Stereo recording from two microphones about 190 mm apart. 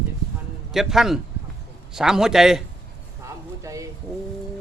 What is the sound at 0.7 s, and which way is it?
Speech, centre (ahead or behind).